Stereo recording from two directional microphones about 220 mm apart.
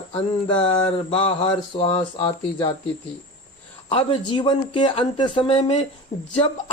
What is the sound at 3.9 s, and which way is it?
A woman's voice, 25° left (ahead or behind).